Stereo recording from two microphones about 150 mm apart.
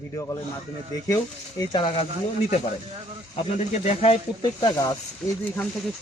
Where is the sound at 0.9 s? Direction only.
25° left (ahead or behind).